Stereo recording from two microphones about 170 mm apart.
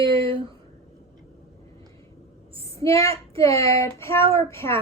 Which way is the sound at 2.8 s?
20° left (ahead or behind).